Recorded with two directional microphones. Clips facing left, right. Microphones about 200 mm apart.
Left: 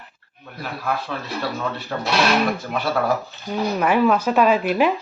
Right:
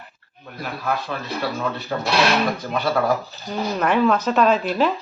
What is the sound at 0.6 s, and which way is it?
Speech, centre (ahead or behind).